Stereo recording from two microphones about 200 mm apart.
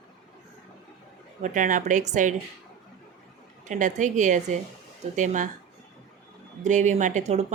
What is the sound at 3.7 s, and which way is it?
Speech, 40° right (ahead or behind).